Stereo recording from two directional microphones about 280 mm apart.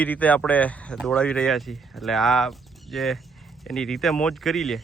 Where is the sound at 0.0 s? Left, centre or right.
Centre.